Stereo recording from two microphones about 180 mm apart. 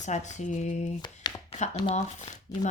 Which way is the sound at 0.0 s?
40° left (ahead or behind).